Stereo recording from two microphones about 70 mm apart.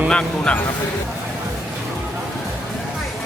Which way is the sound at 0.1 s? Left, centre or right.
Centre.